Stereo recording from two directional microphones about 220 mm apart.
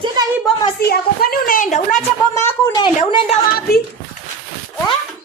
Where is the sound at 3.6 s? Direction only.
45° left (ahead or behind).